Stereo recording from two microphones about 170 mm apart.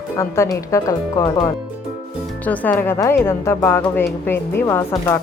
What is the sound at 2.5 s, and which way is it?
Speech, 10° left (ahead or behind).